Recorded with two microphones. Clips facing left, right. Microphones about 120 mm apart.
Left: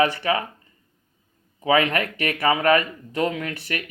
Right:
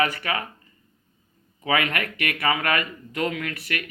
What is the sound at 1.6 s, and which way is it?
Speech, 30° left (ahead or behind).